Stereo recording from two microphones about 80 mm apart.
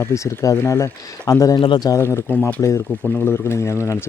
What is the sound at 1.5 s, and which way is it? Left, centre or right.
Speech, left.